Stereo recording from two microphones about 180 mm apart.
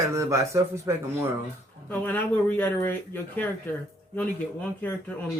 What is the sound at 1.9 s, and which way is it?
Speech, 10° left (ahead or behind).